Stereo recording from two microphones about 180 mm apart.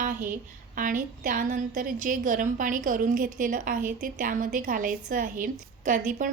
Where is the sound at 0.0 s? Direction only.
50° right (ahead or behind).